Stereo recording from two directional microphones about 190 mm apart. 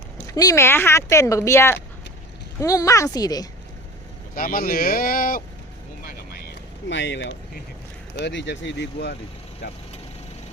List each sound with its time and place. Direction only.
0.3 s speech: 15° left (ahead or behind)
4.4 s speech: 50° left (ahead or behind)
6.1 s a sound: 60° left (ahead or behind)
8.2 s speech: 70° left (ahead or behind)